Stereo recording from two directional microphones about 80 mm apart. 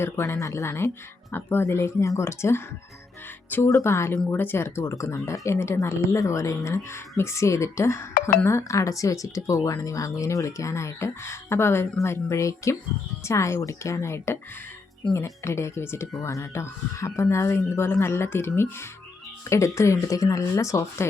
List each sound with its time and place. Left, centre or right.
0.0 s speech: left
3.6 s speech: left